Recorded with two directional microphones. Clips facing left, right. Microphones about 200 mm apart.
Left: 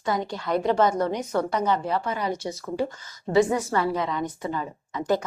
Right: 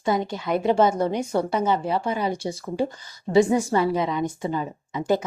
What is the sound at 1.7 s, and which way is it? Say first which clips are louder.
Speech: right 2 dB; 25° right (ahead or behind).